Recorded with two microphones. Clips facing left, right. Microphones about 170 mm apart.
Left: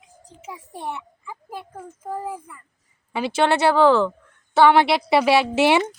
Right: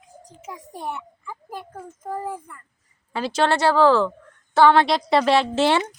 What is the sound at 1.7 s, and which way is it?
Speech, 5° left (ahead or behind).